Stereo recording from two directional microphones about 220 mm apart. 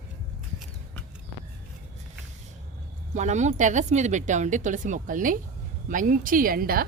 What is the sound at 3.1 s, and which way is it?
A woman's voice, 35° right (ahead or behind).